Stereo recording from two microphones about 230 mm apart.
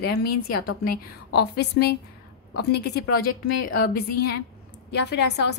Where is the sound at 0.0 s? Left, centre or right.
Left.